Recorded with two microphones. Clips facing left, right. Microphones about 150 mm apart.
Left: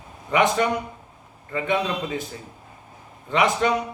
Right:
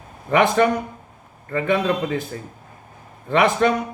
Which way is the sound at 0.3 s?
50° right (ahead or behind).